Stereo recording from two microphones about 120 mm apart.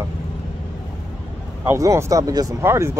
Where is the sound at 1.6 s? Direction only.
25° right (ahead or behind).